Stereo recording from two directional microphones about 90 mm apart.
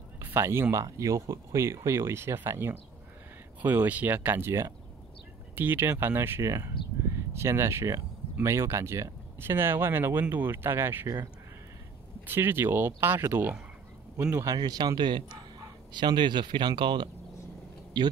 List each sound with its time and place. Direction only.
0.2 s speech: 25° right (ahead or behind)
12.3 s speech: 25° right (ahead or behind)
14.4 s speech: 45° right (ahead or behind)